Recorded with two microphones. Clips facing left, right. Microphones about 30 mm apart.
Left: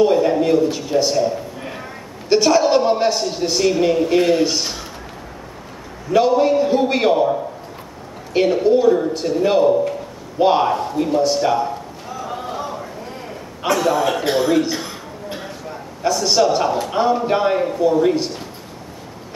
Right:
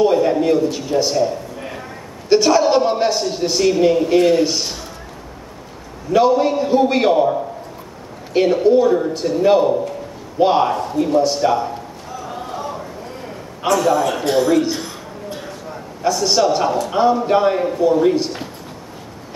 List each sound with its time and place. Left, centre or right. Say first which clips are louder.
0.0 s a man's voice: even; centre
6.1 s a man's voice: even; centre
10.4 s a sound: even; centre
13.6 s a man's voice: right 2 dB; centre
14.6 s a man's voice: right 1 dB; centre
15.2 s a sound: even; centre
15.7 s a man's voice: right 1 dB; centre